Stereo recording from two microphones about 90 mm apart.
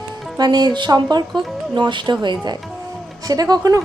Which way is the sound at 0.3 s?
45° right (ahead or behind).